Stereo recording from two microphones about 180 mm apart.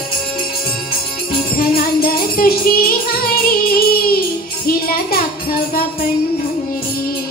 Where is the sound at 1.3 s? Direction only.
55° left (ahead or behind).